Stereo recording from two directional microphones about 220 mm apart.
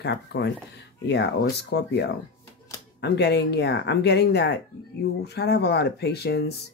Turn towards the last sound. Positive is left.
turn(degrees=45)  # may be behind; listen again after turning